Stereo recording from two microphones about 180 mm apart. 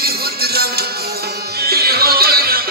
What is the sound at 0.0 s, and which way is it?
Music, 60° right (ahead or behind).